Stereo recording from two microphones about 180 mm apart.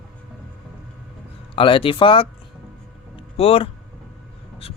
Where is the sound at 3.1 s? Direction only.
35° left (ahead or behind).